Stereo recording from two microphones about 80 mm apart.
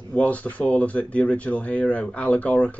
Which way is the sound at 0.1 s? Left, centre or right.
Centre.